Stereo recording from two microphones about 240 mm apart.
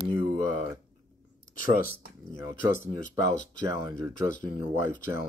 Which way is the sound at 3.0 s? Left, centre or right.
Left.